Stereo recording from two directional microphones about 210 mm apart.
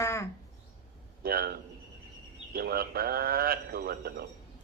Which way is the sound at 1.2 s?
45° right (ahead or behind).